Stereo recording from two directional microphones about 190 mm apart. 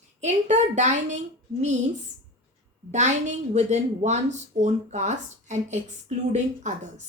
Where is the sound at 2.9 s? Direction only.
40° right (ahead or behind).